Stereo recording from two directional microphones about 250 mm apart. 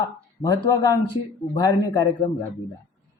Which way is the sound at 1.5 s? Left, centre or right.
Centre.